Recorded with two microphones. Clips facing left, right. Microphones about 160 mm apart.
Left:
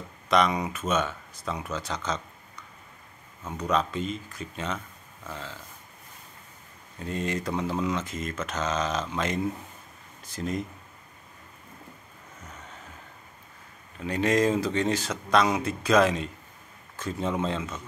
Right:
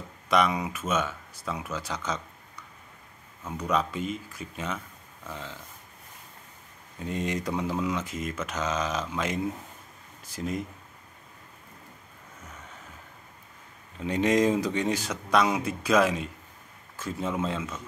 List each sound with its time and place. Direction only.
0.3 s speech: 5° right (ahead or behind)
3.4 s speech: 10° right (ahead or behind)
7.1 s speech: 15° right (ahead or behind)
13.9 s speech: 20° right (ahead or behind)